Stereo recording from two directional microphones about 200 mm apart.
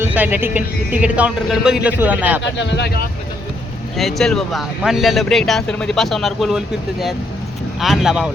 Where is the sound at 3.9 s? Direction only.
Centre (ahead or behind).